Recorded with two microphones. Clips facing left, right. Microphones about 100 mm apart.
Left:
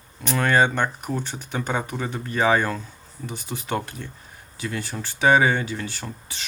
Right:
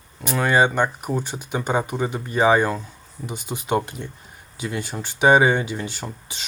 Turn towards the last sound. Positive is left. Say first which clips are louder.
# right 2 dB
turn(degrees=-15)  # may be behind; listen again after turning